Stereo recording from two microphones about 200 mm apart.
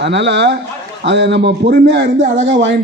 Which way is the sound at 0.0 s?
60° right (ahead or behind).